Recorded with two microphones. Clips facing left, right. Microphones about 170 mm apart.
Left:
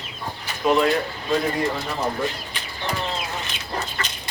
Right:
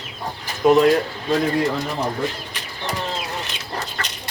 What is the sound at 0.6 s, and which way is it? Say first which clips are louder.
Speech: right 5 dB; 45° right (ahead or behind).